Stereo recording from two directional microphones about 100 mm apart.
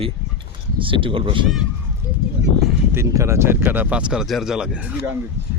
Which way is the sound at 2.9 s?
25° right (ahead or behind).